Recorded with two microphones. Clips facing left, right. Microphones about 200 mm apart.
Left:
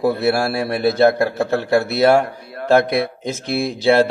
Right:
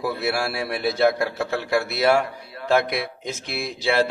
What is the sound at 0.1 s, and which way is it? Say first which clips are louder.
A man's voice: left 7 dB; 50° left (ahead or behind).